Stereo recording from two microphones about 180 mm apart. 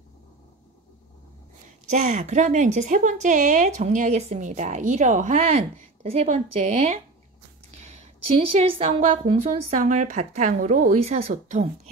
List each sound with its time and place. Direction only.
1.9 s a woman's voice: 40° right (ahead or behind)
8.5 s a woman's voice: 30° right (ahead or behind)